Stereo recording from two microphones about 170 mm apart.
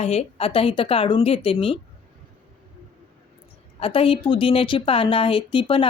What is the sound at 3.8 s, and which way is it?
Speech, 35° left (ahead or behind).